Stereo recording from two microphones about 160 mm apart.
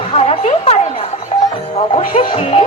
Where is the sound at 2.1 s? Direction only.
40° left (ahead or behind).